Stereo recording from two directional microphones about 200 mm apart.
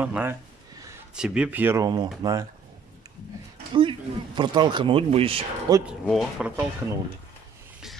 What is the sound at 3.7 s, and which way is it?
Speech, 25° right (ahead or behind).